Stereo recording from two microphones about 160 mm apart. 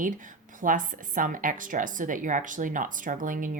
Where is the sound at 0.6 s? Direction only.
55° right (ahead or behind).